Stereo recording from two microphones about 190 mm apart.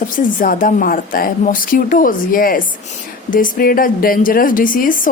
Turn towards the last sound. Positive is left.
turn(degrees=45)  # may be behind; listen again after turning